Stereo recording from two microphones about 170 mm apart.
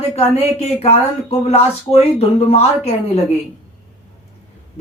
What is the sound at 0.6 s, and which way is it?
Speech, 35° left (ahead or behind).